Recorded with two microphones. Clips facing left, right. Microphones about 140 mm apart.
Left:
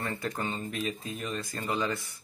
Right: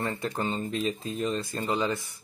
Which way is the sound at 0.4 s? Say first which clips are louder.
Right 4 dB; 35° right (ahead or behind).